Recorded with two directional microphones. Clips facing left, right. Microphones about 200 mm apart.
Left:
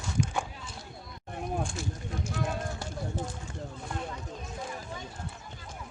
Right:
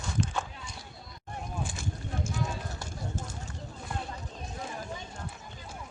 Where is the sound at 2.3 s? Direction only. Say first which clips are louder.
Left 5 dB; 60° left (ahead or behind).